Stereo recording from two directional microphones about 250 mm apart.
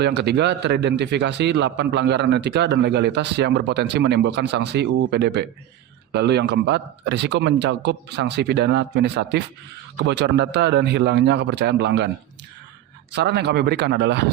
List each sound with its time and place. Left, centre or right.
0.0 s a man's voice: right
13.1 s a man's voice: right